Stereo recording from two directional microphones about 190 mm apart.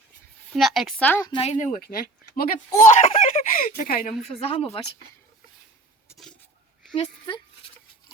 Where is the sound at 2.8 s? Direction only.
35° left (ahead or behind).